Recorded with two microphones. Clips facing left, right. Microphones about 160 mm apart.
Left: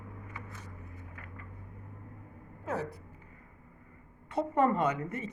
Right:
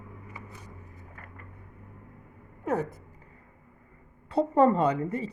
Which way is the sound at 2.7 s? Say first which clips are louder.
Right 6 dB; 55° right (ahead or behind).